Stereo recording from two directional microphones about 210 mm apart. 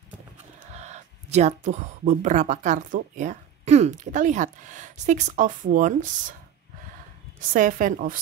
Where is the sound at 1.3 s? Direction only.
35° right (ahead or behind).